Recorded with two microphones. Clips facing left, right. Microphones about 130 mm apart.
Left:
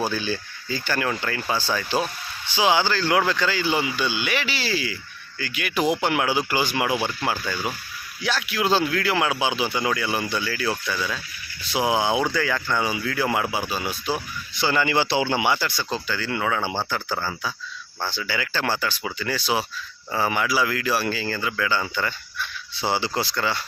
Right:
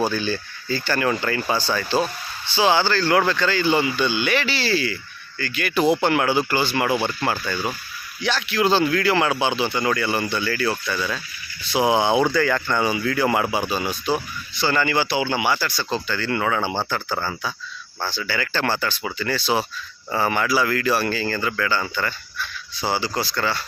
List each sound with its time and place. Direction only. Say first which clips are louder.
0.1 s speech: right 2 dB; 10° left (ahead or behind)
14.6 s a man's voice: right 1 dB; 15° left (ahead or behind)
15.8 s speech: right 2 dB; 10° left (ahead or behind)
18.0 s speech: right 2 dB; 15° left (ahead or behind)